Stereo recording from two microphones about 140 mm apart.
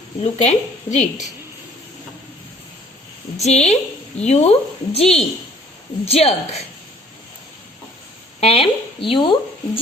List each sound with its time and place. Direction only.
0.2 s a woman's voice: 55° left (ahead or behind)
3.4 s a woman's voice: 50° left (ahead or behind)
8.4 s speech: 45° left (ahead or behind)